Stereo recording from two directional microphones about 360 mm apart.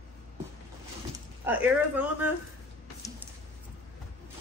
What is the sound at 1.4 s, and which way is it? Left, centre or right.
Speech, centre.